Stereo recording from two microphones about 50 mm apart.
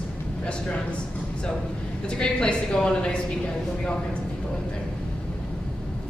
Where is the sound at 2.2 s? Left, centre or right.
Centre.